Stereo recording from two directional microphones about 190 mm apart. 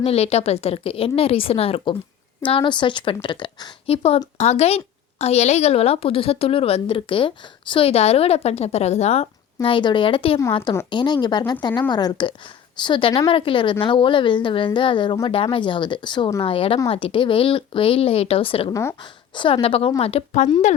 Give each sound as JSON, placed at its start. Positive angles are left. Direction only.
{"t": 0.0, "sound": "a woman's voice", "side_deg": 30}
{"t": 18.7, "sound": "speech", "side_deg": 15}
{"t": 19.4, "sound": "a woman's voice", "side_deg": 25}